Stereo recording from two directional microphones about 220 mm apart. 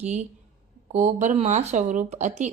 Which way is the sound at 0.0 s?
30° right (ahead or behind).